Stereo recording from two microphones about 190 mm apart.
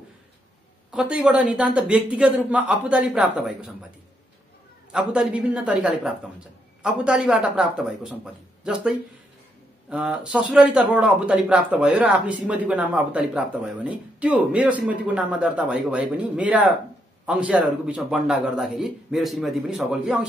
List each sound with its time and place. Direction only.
0.9 s speech: 5° right (ahead or behind)
4.9 s speech: 5° right (ahead or behind)